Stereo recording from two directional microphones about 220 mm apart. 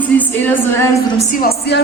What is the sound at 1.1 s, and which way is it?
Speech, 40° left (ahead or behind).